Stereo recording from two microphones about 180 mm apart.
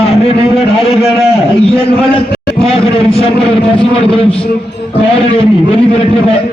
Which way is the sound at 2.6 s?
35° left (ahead or behind).